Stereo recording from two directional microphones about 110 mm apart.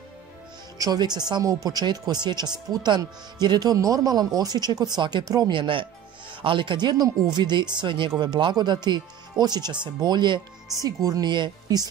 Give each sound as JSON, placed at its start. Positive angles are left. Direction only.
{"t": 0.7, "sound": "speech", "side_deg": -35}